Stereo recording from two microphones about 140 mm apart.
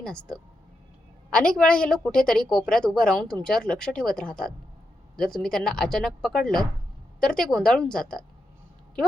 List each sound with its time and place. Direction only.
1.5 s a woman's voice: 5° left (ahead or behind)